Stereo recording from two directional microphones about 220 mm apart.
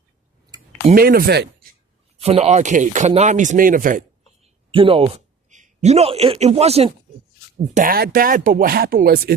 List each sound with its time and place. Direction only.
0.9 s speech: 45° right (ahead or behind)
2.1 s speech: 30° right (ahead or behind)
4.7 s speech: 25° right (ahead or behind); by 9.3 s 45° right (ahead or behind)